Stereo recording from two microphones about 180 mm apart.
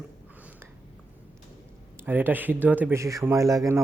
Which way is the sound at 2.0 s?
10° right (ahead or behind).